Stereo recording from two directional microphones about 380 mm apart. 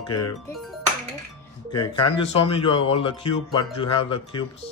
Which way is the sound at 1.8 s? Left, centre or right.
Left.